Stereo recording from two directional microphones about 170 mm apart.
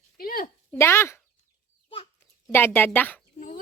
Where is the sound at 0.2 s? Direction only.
60° left (ahead or behind).